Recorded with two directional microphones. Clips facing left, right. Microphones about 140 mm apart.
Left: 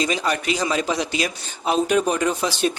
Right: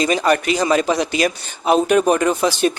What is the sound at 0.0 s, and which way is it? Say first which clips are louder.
Speech: right 6 dB; 55° right (ahead or behind).